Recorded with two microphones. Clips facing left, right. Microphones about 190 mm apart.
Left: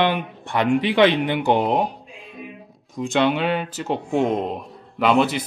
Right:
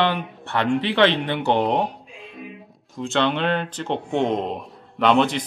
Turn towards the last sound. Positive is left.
turn(degrees=5)  # may be behind; listen again after turning